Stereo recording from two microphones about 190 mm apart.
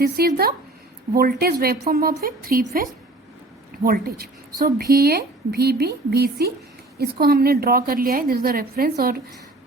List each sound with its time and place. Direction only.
0.0 s a woman's voice: 55° right (ahead or behind)